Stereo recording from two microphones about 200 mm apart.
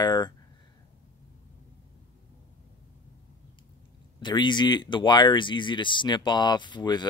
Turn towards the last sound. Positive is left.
turn(degrees=20)  # may be behind; listen again after turning